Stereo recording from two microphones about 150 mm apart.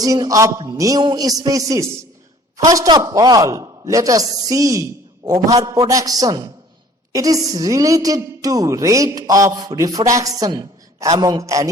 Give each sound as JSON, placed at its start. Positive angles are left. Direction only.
{"t": 0.0, "sound": "a woman's voice", "side_deg": -25}